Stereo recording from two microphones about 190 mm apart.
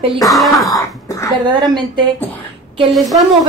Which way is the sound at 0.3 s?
Centre (ahead or behind).